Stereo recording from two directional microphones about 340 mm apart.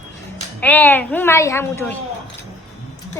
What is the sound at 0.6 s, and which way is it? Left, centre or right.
A woman's voice, centre.